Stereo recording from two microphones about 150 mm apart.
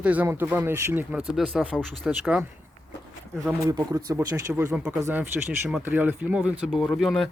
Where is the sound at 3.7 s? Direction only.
25° right (ahead or behind); by 7.2 s centre (ahead or behind).